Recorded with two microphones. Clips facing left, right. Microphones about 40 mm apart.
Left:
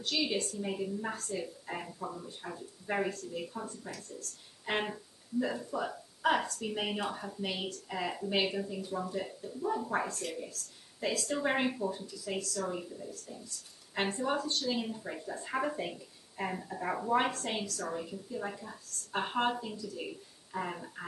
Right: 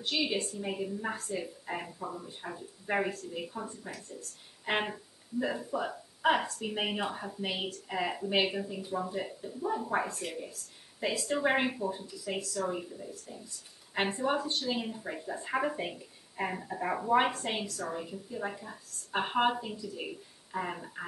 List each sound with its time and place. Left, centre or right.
0.0 s speech: centre